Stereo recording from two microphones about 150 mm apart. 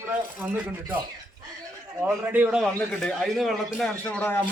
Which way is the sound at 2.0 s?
10° right (ahead or behind).